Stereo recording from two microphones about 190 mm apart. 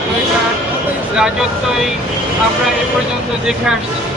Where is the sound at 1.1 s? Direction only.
5° right (ahead or behind).